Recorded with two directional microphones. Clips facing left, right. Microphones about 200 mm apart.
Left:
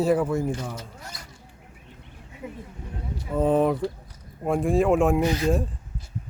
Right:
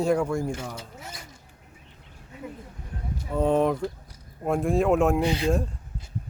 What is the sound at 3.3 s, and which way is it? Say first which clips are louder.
Speech: left 1 dB; centre (ahead or behind).